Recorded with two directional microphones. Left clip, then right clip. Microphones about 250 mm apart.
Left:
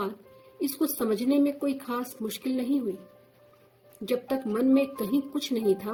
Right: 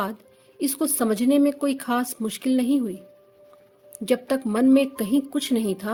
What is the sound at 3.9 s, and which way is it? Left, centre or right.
A woman's voice, right.